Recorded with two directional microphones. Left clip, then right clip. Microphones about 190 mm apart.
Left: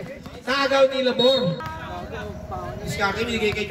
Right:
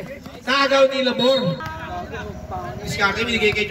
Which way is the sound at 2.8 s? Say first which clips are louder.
Right 4 dB; 40° left (ahead or behind).